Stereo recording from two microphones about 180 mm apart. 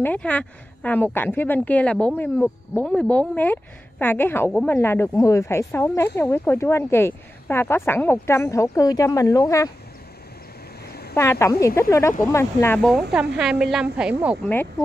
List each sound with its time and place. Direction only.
0.0 s speech: 10° left (ahead or behind)
11.1 s speech: 15° left (ahead or behind)
13.4 s a woman's voice: 5° right (ahead or behind)